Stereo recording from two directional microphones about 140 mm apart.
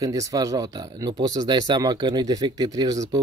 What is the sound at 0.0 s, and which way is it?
Speech, 25° right (ahead or behind).